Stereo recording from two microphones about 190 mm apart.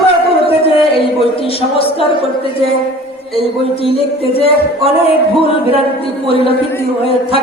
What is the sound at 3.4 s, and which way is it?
Speech, 30° left (ahead or behind).